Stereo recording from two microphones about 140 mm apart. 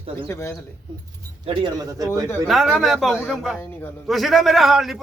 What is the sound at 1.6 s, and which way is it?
Speech, 25° right (ahead or behind).